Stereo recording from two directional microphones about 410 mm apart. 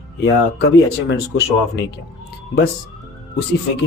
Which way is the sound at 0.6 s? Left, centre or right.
Left.